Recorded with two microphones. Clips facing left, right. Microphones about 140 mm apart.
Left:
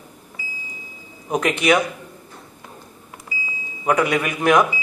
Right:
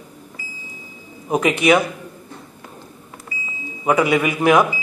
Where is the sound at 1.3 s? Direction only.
5° right (ahead or behind).